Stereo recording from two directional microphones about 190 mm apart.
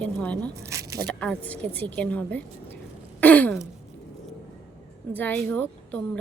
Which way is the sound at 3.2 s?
10° left (ahead or behind).